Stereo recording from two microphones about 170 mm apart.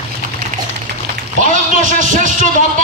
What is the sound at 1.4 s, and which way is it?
A man's voice, 50° right (ahead or behind).